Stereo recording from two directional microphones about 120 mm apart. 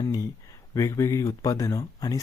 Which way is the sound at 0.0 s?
35° left (ahead or behind).